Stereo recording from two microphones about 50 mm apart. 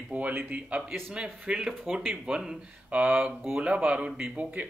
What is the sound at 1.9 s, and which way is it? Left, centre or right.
Speech, right.